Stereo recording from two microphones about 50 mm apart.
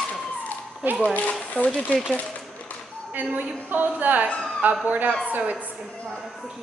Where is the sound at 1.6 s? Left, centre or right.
Left.